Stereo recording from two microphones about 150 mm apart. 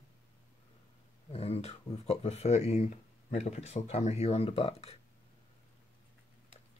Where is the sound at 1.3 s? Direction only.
40° left (ahead or behind).